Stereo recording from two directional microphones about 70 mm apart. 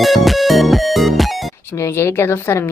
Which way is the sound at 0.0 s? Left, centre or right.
Centre.